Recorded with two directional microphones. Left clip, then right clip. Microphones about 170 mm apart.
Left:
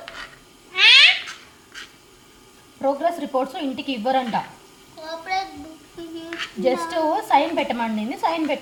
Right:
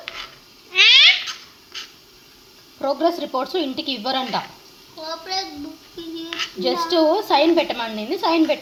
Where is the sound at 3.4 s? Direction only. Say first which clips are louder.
Right 1 dB; 50° right (ahead or behind).